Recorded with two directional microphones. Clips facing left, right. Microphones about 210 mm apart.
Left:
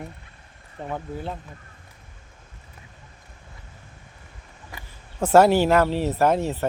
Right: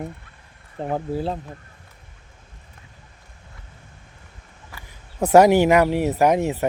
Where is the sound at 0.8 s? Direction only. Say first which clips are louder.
Right 7 dB; 35° right (ahead or behind).